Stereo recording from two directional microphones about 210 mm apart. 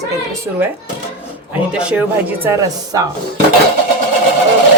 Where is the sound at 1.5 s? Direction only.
5° right (ahead or behind).